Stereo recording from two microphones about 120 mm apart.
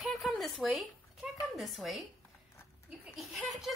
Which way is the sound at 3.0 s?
Centre (ahead or behind).